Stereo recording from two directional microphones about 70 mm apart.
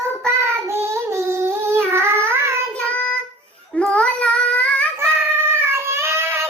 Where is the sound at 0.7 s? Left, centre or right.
Right.